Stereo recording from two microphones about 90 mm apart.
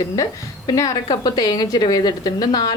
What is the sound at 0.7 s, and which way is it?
A woman's voice, 45° left (ahead or behind).